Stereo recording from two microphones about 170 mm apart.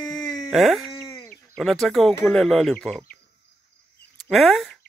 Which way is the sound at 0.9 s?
15° left (ahead or behind).